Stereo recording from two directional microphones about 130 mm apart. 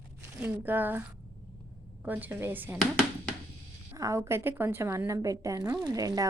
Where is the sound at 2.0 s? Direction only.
15° right (ahead or behind).